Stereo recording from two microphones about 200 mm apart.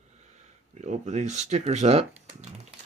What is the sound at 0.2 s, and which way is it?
Speech, 35° right (ahead or behind).